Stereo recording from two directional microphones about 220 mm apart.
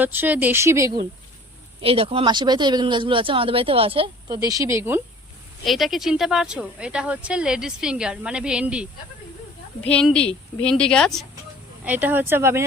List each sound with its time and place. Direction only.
0.0 s speech: 10° right (ahead or behind)
1.8 s speech: 25° right (ahead or behind)